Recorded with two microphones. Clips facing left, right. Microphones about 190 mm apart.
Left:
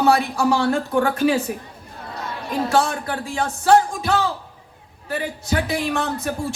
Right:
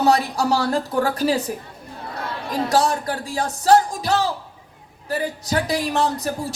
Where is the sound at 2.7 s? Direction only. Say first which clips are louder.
Right 2 dB; 35° right (ahead or behind).